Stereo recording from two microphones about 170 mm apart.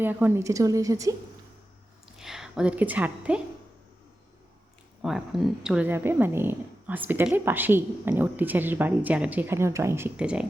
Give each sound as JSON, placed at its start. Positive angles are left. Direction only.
{"t": 0.0, "sound": "a woman's voice", "side_deg": -10}
{"t": 2.0, "sound": "a woman's voice", "side_deg": 0}
{"t": 5.0, "sound": "speech", "side_deg": 0}